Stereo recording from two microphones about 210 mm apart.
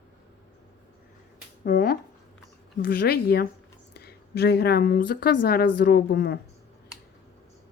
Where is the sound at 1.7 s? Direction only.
40° left (ahead or behind).